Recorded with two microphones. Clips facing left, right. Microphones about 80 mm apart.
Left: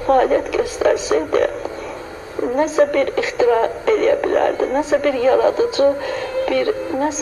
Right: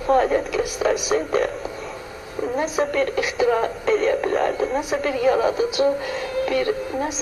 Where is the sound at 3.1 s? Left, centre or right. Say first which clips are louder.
Left 4 dB; centre.